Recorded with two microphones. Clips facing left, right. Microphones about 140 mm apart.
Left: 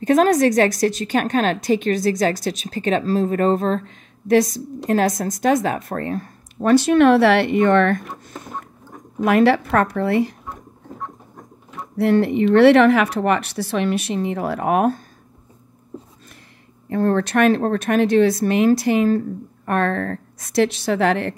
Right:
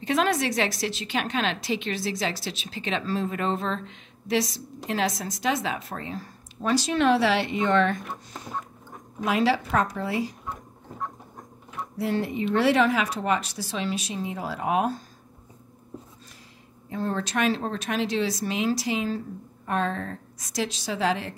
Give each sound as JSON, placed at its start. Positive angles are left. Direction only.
{"t": 0.0, "sound": "speech", "side_deg": 45}
{"t": 9.2, "sound": "speech", "side_deg": 60}
{"t": 12.0, "sound": "speech", "side_deg": 65}
{"t": 16.9, "sound": "speech", "side_deg": 60}